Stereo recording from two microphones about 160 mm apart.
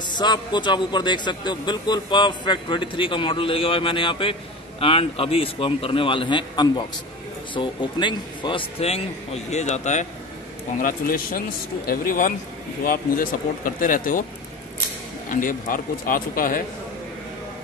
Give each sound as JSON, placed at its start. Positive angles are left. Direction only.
{"t": 0.2, "sound": "a man's voice", "side_deg": 25}
{"t": 10.8, "sound": "speech", "side_deg": 60}
{"t": 15.2, "sound": "speech", "side_deg": 60}